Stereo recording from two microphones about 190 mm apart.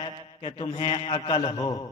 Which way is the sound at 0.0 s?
30° left (ahead or behind).